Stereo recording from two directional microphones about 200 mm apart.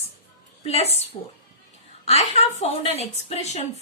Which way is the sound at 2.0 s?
30° left (ahead or behind).